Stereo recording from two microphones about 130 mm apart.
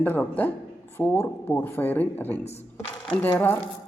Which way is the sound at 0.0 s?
15° left (ahead or behind).